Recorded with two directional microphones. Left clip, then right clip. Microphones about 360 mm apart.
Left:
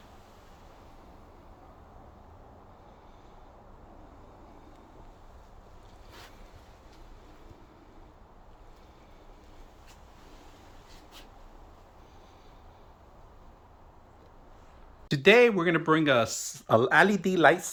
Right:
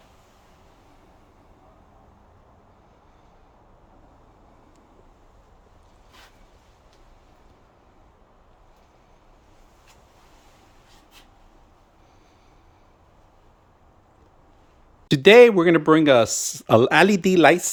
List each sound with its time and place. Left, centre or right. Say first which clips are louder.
15.0 s speech: right 9 dB; right